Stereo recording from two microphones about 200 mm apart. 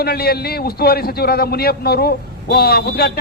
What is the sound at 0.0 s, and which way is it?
A man's voice, 50° left (ahead or behind).